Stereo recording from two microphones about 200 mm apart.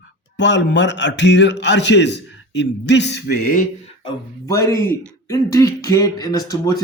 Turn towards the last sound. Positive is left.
turn(degrees=20)  # may be behind; listen again after turning